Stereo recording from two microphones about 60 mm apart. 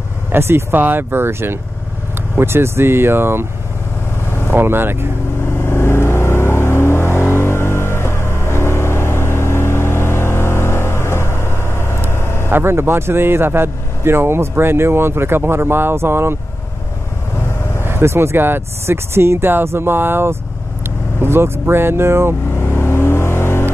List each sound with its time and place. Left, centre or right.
0.3 s speech: right
4.5 s speech: right
5.4 s vehicle: left
12.4 s speech: right
17.8 s speech: right
22.6 s vehicle: left